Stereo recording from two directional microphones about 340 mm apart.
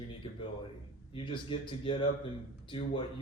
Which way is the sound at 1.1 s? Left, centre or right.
Centre.